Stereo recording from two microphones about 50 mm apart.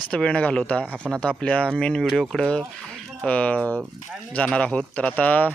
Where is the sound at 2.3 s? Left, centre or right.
Centre.